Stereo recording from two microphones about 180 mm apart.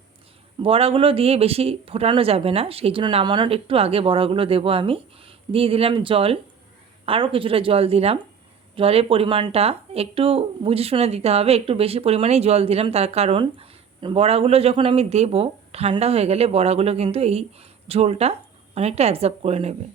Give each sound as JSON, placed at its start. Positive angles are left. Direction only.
{"t": 0.6, "sound": "speech", "side_deg": -30}